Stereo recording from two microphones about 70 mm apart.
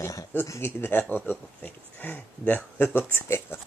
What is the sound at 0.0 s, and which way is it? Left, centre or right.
Speech, left.